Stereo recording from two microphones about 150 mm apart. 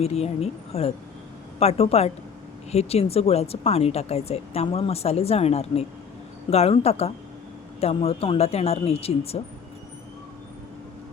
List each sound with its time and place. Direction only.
0.0 s speech: 45° left (ahead or behind)